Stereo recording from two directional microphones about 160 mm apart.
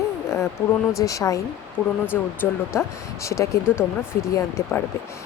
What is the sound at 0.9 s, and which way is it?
Speech, 20° left (ahead or behind).